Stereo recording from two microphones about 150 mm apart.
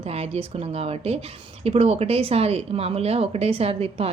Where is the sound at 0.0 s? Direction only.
40° right (ahead or behind).